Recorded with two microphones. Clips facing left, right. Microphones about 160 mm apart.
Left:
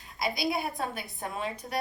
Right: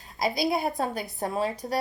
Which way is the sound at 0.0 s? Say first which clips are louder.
Right 5 dB; 40° right (ahead or behind).